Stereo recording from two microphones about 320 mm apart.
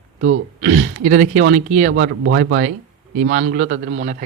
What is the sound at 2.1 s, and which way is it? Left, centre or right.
Speech, right.